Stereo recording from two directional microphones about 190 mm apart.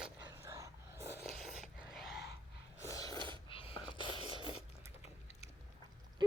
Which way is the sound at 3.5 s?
30° left (ahead or behind).